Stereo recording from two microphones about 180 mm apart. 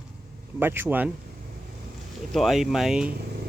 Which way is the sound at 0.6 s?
10° right (ahead or behind).